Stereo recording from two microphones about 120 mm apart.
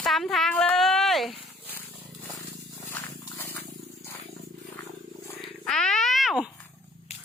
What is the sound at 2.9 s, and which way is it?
Purr, 20° left (ahead or behind).